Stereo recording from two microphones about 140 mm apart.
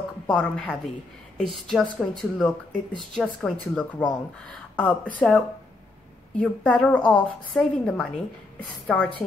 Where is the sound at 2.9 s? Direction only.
35° right (ahead or behind).